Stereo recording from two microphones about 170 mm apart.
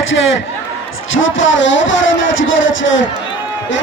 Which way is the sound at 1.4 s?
90° left.